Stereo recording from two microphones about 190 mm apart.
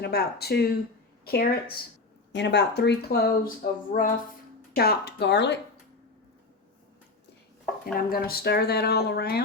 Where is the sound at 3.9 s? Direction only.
40° left (ahead or behind).